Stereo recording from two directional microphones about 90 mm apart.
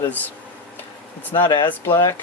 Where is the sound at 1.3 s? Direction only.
60° left (ahead or behind).